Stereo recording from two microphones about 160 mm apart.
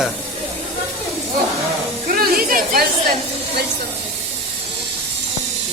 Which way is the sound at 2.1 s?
60° right (ahead or behind).